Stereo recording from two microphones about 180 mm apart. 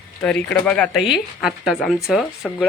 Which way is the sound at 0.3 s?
5° left (ahead or behind).